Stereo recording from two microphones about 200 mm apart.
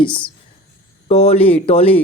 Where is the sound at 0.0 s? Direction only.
25° left (ahead or behind).